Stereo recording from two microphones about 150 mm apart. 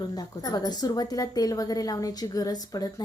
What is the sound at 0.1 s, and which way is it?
A woman's voice, 25° left (ahead or behind).